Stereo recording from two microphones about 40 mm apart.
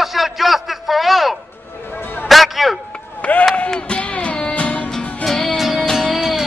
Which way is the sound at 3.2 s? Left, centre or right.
Left.